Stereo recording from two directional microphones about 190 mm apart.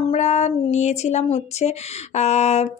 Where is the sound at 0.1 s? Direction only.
35° left (ahead or behind).